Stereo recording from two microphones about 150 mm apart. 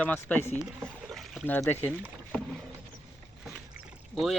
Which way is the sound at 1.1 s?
Centre (ahead or behind).